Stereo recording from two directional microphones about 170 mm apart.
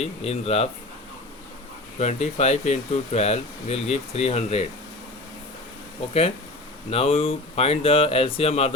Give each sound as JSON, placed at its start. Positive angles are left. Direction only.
{"t": 0.0, "sound": "speech", "side_deg": 40}
{"t": 2.0, "sound": "speech", "side_deg": 40}
{"t": 6.9, "sound": "speech", "side_deg": 35}